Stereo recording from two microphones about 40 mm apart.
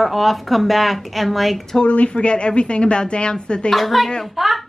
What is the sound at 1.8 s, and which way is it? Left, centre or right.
A woman's voice, left.